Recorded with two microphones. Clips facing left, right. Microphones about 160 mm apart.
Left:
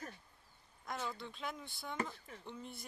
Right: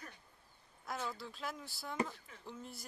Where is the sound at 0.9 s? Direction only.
5° right (ahead or behind).